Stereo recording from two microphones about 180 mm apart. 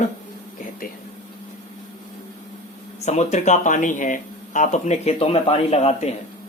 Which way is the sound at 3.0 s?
40° left (ahead or behind).